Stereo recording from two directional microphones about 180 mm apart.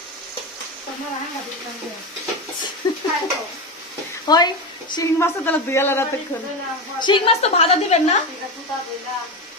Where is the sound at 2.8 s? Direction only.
25° left (ahead or behind).